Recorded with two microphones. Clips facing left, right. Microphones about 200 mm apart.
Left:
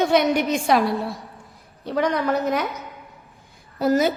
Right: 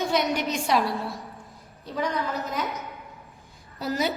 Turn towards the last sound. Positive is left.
turn(degrees=50)  # may be behind; listen again after turning